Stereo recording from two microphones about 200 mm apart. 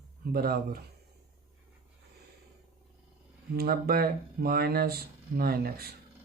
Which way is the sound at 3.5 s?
50° right (ahead or behind).